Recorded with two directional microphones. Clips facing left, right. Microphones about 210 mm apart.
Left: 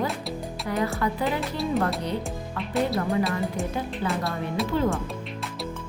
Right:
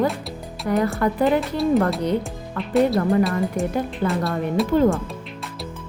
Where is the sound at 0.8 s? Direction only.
50° right (ahead or behind).